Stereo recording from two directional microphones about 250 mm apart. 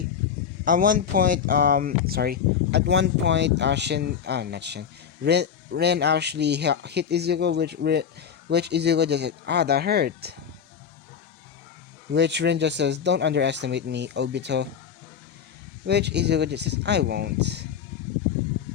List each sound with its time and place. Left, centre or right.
0.6 s speech: right
12.1 s speech: right
15.9 s speech: right